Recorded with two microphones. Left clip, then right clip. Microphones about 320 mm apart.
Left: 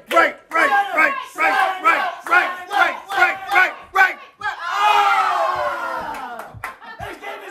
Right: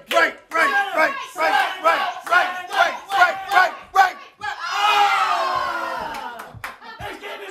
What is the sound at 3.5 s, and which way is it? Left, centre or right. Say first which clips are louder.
Battle cry: even; centre.